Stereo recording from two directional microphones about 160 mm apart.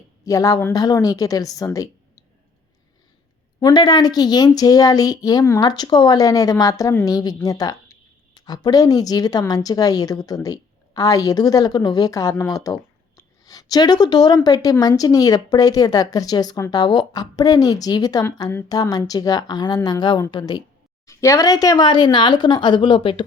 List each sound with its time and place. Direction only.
0.3 s a woman's voice: 20° left (ahead or behind)
3.6 s a woman's voice: 25° left (ahead or behind)